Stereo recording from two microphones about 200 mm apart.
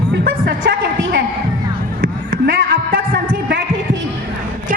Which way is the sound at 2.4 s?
65° right (ahead or behind).